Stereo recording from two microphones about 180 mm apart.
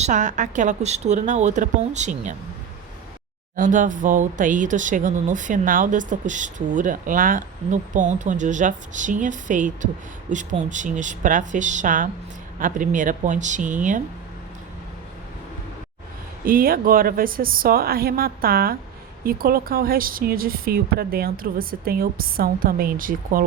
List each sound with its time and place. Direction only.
0.0 s a woman's voice: 40° right (ahead or behind)
3.5 s speech: 45° right (ahead or behind)
16.5 s speech: 55° right (ahead or behind)